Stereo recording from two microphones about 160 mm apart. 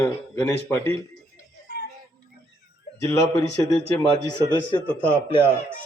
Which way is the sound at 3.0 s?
20° left (ahead or behind).